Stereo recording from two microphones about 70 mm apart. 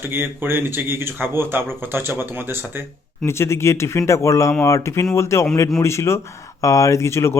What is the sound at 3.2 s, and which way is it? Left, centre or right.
Speech, left.